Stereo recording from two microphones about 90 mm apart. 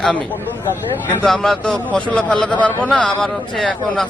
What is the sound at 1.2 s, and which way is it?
A man's voice, 5° left (ahead or behind).